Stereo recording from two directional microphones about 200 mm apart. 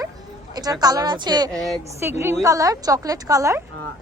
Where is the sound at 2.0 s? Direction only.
10° right (ahead or behind).